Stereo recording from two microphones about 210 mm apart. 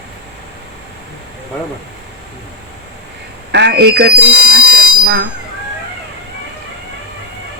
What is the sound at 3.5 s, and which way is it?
Speech, 55° right (ahead or behind).